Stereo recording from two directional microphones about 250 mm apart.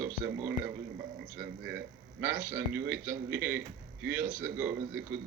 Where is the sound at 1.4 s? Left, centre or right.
Right.